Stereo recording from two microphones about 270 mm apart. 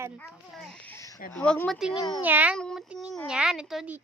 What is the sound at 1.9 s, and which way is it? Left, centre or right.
Speech, centre.